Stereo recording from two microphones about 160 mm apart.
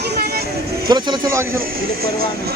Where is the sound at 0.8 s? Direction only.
25° right (ahead or behind).